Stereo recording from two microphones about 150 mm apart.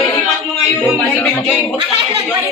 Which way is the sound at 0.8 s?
10° left (ahead or behind).